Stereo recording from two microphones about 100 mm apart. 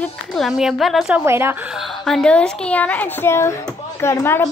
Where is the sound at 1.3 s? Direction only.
25° right (ahead or behind).